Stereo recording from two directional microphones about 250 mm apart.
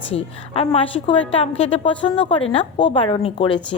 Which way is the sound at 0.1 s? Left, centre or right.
Left.